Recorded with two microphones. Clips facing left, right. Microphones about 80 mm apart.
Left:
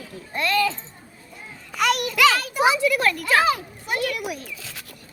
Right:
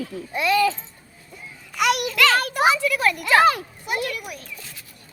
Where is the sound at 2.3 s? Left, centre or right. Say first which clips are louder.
Right 5 dB; right.